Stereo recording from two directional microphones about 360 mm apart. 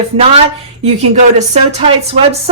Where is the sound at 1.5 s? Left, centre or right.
Centre.